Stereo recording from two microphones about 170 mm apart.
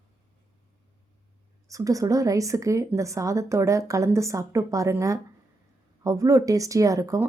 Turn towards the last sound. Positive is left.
turn(degrees=-20)  # may be behind; listen again after turning